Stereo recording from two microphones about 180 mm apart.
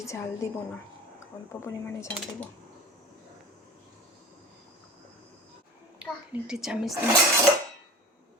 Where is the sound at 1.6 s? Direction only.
15° left (ahead or behind).